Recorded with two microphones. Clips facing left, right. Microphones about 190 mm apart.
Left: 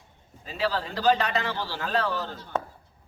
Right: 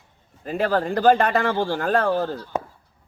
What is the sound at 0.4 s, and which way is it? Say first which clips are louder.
Speech: right 7 dB; 50° right (ahead or behind).